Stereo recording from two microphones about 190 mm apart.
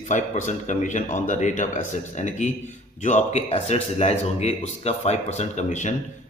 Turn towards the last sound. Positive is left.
turn(degrees=40)  # may be behind; listen again after turning